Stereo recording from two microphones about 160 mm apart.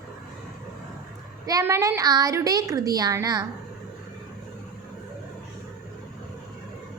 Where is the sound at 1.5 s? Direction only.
20° right (ahead or behind).